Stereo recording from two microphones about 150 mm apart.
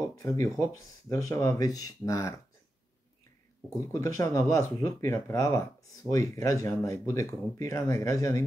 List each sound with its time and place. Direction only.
0.1 s speech: 20° left (ahead or behind)
3.9 s speech: 20° left (ahead or behind)